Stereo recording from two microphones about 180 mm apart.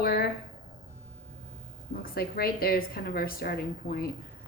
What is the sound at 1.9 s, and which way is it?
Speech, 55° left (ahead or behind).